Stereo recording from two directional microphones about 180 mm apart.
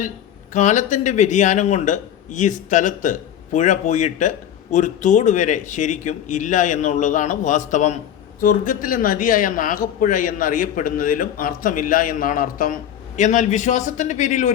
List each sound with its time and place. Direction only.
0.5 s speech: 45° left (ahead or behind)